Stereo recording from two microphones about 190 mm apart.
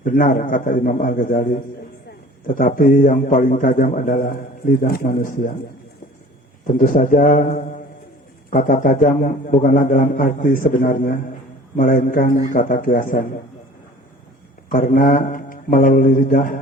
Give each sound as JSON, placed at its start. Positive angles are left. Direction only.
{"t": 0.0, "sound": "a man's voice", "side_deg": 45}
{"t": 6.7, "sound": "a man's voice", "side_deg": 45}
{"t": 14.7, "sound": "a man's voice", "side_deg": 45}